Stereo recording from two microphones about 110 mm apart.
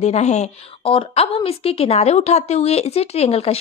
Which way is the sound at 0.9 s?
60° left (ahead or behind).